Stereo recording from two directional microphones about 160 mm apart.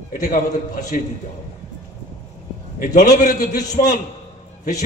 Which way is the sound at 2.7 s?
55° left (ahead or behind).